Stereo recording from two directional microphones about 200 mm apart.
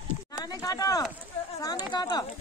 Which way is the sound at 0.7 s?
20° left (ahead or behind).